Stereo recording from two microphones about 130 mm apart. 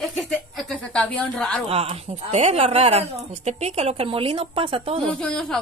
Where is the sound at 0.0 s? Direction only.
Centre (ahead or behind).